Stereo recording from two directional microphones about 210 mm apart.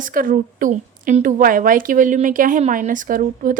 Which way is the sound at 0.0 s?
40° right (ahead or behind).